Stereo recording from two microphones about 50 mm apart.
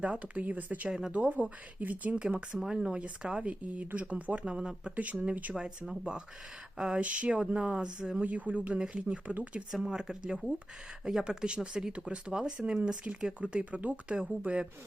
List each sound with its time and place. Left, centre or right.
0.0 s speech: right
0.9 s speech: centre
1.1 s speech: right
2.6 s speech: centre
5.3 s speech: right
5.5 s speech: centre
7.0 s speech: right
8.2 s speech: right
8.8 s speech: centre
9.9 s speech: centre